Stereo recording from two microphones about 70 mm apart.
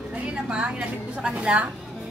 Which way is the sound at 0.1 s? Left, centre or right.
Centre.